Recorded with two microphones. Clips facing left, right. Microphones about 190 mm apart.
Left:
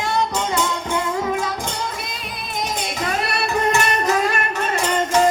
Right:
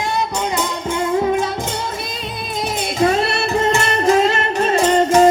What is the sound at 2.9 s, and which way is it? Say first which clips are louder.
Music: right 10 dB; 30° right (ahead or behind).